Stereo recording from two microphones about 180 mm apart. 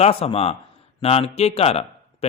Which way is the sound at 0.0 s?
35° left (ahead or behind).